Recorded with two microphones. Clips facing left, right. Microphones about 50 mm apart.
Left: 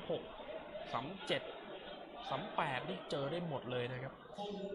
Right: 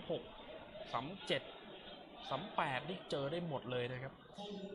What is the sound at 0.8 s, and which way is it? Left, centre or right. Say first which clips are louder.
Speech: right 1 dB; centre.